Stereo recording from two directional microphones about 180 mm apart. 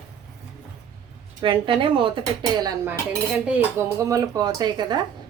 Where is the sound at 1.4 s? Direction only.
30° right (ahead or behind).